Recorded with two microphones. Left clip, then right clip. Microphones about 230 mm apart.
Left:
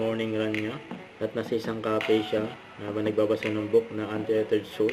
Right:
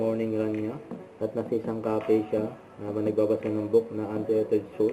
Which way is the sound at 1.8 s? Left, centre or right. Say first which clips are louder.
Left 1 dB; left.